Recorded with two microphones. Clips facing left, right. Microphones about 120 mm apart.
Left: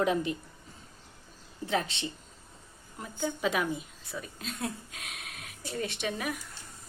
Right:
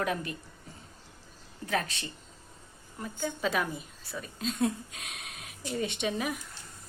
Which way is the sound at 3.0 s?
10° left (ahead or behind).